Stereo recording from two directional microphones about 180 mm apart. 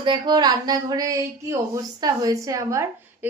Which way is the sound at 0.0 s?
25° right (ahead or behind).